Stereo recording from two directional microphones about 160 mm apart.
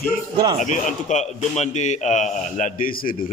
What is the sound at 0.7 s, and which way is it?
A man's voice, 50° left (ahead or behind).